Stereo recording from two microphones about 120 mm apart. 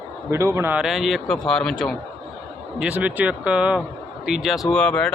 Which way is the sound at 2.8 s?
15° right (ahead or behind).